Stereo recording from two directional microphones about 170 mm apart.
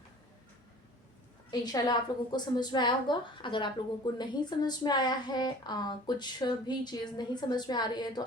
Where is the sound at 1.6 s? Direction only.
25° left (ahead or behind).